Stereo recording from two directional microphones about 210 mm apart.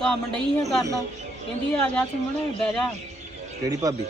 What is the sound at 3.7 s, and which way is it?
Speech, 15° right (ahead or behind).